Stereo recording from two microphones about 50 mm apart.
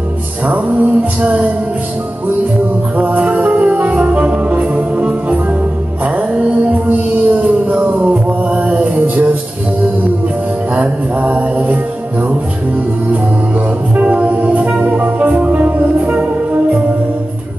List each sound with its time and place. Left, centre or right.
0.5 s music: right
3.0 s music: right
10.7 s music: right
13.9 s music: right